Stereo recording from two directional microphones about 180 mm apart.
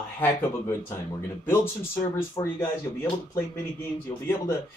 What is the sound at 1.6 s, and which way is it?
Speech, 25° left (ahead or behind).